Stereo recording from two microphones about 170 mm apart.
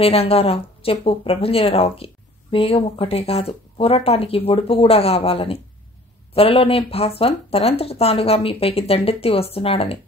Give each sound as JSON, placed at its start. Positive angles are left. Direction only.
{"t": 0.0, "sound": "speech", "side_deg": 35}